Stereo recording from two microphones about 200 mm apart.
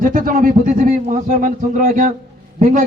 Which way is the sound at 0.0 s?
45° right (ahead or behind).